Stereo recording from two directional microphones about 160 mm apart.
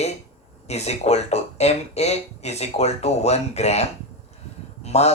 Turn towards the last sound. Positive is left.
turn(degrees=40)  # may be behind; listen again after turning